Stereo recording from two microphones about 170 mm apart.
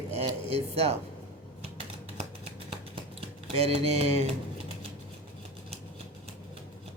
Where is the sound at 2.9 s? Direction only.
35° right (ahead or behind).